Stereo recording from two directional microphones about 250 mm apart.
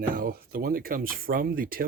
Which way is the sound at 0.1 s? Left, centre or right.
Right.